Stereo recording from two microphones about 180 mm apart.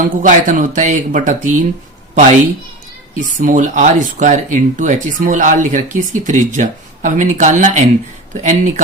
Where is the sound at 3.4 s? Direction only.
45° right (ahead or behind).